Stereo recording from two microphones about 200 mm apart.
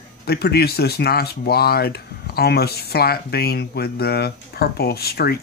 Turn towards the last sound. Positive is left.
turn(degrees=50)  # may be behind; listen again after turning